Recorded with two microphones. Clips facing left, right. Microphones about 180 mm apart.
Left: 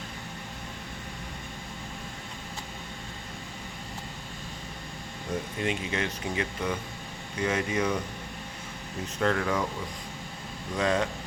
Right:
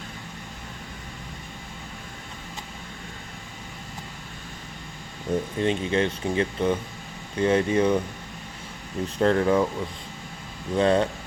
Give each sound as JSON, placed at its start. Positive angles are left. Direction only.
{"t": 5.5, "sound": "speech", "side_deg": -30}
{"t": 9.1, "sound": "speech", "side_deg": -30}
{"t": 10.8, "sound": "speech", "side_deg": -30}